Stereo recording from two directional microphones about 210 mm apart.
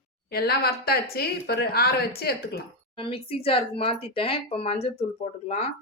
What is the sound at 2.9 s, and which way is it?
Speech, 25° left (ahead or behind).